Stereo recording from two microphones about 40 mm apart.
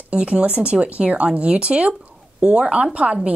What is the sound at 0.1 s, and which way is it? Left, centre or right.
A woman's voice, right.